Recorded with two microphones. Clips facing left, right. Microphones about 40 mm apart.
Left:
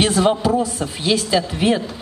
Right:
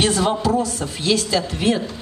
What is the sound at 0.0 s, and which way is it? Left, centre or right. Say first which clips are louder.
A woman's voice: left 2 dB; centre.